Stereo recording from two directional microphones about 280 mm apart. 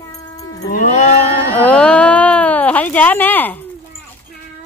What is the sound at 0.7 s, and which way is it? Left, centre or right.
Cattle, left.